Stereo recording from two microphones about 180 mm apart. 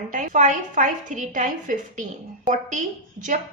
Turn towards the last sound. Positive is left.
turn(degrees=-45)  # may be behind; listen again after turning